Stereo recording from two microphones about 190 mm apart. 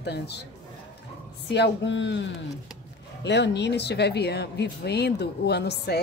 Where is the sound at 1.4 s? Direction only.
65° left (ahead or behind).